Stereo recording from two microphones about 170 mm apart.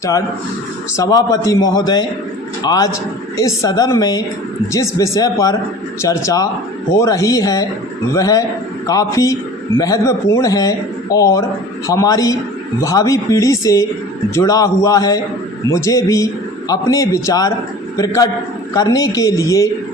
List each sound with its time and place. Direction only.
0.9 s a man's voice: 20° left (ahead or behind)